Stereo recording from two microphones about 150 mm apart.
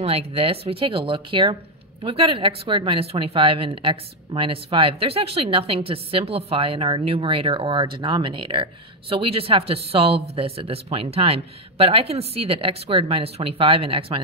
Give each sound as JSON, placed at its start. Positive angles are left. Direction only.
{"t": 0.0, "sound": "speech", "side_deg": -40}